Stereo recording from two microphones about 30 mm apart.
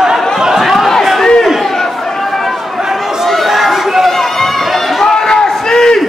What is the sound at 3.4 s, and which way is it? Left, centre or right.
Chatter, centre.